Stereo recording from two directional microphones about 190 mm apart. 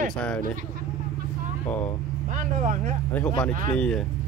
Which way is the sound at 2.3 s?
45° right (ahead or behind).